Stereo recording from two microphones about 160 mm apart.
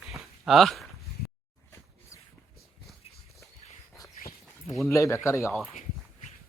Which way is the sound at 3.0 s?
40° left (ahead or behind).